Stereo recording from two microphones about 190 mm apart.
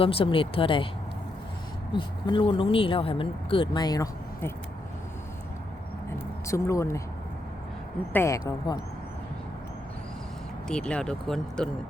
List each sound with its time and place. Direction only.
0.0 s speech: 30° left (ahead or behind)
1.9 s speech: 25° left (ahead or behind)
6.5 s speech: 15° left (ahead or behind)
8.1 s speech: 15° left (ahead or behind)
10.7 s speech: 5° left (ahead or behind)